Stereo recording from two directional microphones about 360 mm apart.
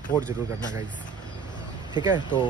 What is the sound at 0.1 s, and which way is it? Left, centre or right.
Speech, centre.